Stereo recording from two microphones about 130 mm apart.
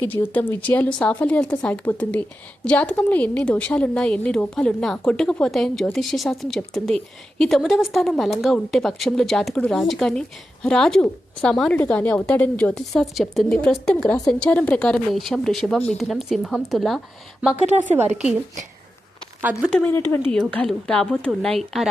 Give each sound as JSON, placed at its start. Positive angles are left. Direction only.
{"t": 0.0, "sound": "a woman's voice", "side_deg": 15}
{"t": 19.4, "sound": "speech", "side_deg": -10}
{"t": 19.7, "sound": "a woman's voice", "side_deg": 15}
{"t": 20.4, "sound": "a woman's voice", "side_deg": 5}